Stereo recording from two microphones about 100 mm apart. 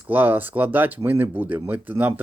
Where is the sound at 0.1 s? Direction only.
20° right (ahead or behind).